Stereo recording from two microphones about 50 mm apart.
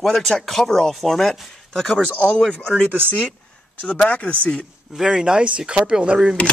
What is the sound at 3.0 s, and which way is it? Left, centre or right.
Speech, left.